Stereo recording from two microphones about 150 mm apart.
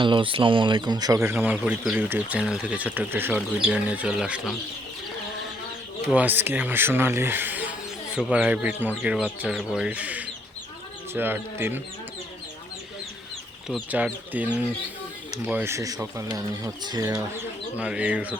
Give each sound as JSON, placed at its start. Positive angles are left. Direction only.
{"t": 0.0, "sound": "speech", "side_deg": -35}
{"t": 6.1, "sound": "speech", "side_deg": -10}
{"t": 13.9, "sound": "speech", "side_deg": -10}
{"t": 17.7, "sound": "speech", "side_deg": -10}